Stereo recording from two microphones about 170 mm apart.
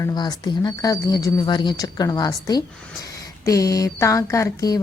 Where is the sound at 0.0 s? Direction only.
25° left (ahead or behind).